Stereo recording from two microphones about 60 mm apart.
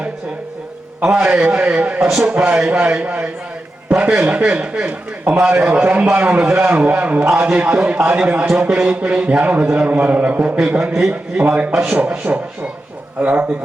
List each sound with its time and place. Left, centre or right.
1.0 s a man's voice: right
11.7 s a man's voice: centre
13.1 s a man's voice: right